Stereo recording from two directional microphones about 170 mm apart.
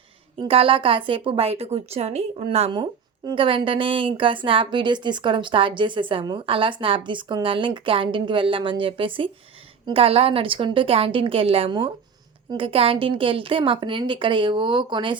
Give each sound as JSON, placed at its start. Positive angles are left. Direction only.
{"t": 0.3, "sound": "a woman's voice", "side_deg": -30}